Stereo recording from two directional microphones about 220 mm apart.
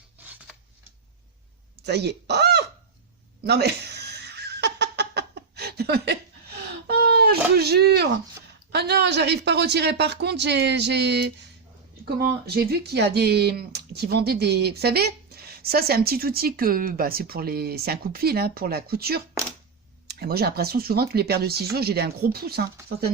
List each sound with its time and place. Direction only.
1.8 s goose: 50° right (ahead or behind)
3.4 s giggle: 50° right (ahead or behind)
8.7 s speech: 50° right (ahead or behind)